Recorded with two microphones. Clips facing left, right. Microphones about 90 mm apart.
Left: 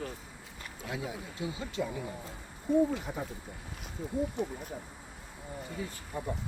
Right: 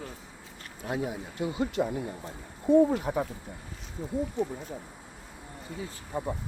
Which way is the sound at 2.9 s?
70° right (ahead or behind).